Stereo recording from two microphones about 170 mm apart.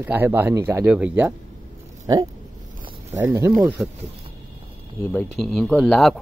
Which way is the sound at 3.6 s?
Centre (ahead or behind).